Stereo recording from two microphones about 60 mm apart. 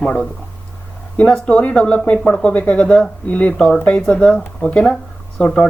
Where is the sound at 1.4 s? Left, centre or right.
Centre.